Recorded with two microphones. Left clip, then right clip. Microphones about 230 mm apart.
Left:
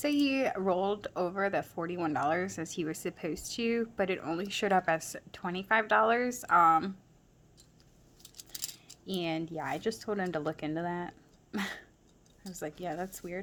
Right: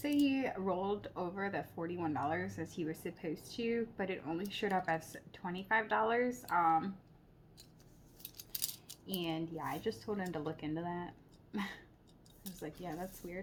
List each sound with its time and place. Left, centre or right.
0.0 s speech: left
9.0 s speech: left